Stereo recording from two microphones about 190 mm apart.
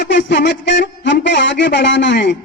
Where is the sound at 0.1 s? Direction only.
70° left (ahead or behind).